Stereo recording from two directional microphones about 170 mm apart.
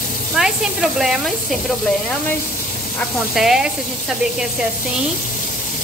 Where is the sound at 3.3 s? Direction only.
Centre (ahead or behind).